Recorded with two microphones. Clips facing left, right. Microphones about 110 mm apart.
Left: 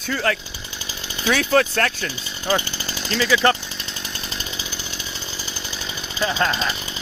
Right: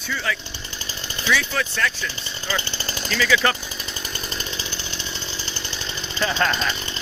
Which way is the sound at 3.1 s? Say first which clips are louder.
Left 2 dB; 35° left (ahead or behind).